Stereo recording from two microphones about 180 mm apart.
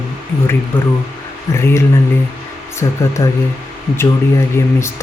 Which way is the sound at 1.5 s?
15° left (ahead or behind).